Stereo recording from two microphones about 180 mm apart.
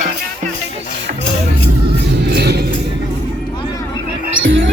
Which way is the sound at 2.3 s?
65° right (ahead or behind).